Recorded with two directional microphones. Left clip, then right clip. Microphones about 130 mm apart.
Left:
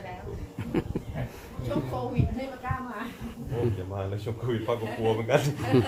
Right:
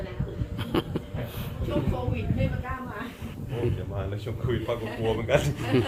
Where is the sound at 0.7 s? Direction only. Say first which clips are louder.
Right 3 dB; 20° left (ahead or behind).